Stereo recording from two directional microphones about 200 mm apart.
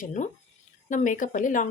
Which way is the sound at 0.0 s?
35° left (ahead or behind).